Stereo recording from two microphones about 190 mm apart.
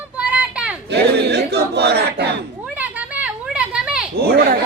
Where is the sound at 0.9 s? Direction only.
60° right (ahead or behind).